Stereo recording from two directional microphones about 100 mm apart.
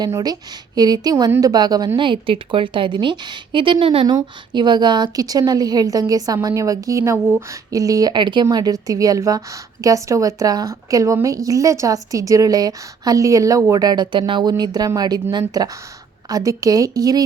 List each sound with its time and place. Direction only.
0.1 s a woman's voice: 40° right (ahead or behind)
2.0 s a woman's voice: 60° right (ahead or behind)
4.0 s a woman's voice: 45° right (ahead or behind)
13.8 s speech: 45° right (ahead or behind)
14.5 s a woman's voice: 40° right (ahead or behind)